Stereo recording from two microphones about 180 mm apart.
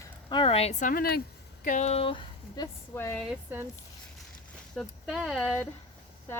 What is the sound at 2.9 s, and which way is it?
Speech, 15° left (ahead or behind).